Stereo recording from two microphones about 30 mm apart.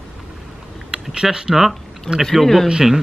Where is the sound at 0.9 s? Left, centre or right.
Right.